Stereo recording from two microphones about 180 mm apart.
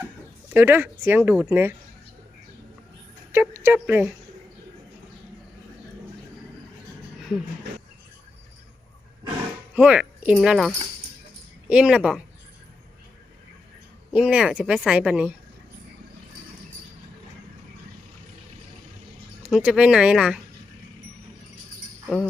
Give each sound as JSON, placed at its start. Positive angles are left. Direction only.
{"t": 0.5, "sound": "speech", "side_deg": -10}
{"t": 3.3, "sound": "a sound", "side_deg": -15}
{"t": 9.3, "sound": "dog", "side_deg": -10}
{"t": 11.7, "sound": "a woman's voice", "side_deg": -5}
{"t": 14.1, "sound": "a woman's voice", "side_deg": -5}
{"t": 19.4, "sound": "a woman's voice", "side_deg": -5}
{"t": 22.0, "sound": "jingle bell", "side_deg": 0}